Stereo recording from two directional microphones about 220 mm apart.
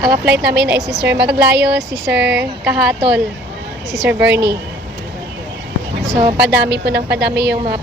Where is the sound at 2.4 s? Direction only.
5° right (ahead or behind).